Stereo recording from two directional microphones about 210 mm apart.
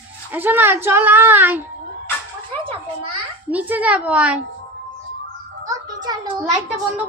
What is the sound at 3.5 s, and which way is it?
Speech, 5° right (ahead or behind).